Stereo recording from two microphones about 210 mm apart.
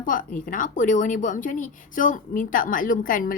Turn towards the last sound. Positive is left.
turn(degrees=40)  # may be behind; listen again after turning